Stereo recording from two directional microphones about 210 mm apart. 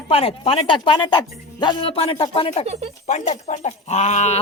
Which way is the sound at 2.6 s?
30° right (ahead or behind).